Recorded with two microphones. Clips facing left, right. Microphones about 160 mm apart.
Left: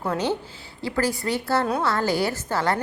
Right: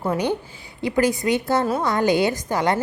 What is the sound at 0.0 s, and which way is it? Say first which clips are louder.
A woman's voice: right 2 dB; 10° right (ahead or behind).